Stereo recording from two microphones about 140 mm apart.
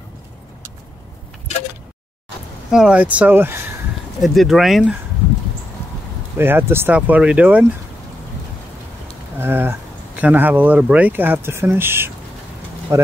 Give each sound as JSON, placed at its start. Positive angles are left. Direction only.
{"t": 2.7, "sound": "speech", "side_deg": -5}
{"t": 4.2, "sound": "speech", "side_deg": 0}
{"t": 6.3, "sound": "speech", "side_deg": -15}
{"t": 9.4, "sound": "speech", "side_deg": -15}